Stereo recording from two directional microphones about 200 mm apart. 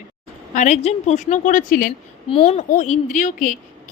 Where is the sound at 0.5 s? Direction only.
35° left (ahead or behind).